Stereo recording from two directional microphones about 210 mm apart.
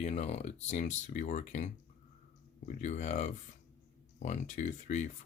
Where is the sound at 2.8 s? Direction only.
35° left (ahead or behind).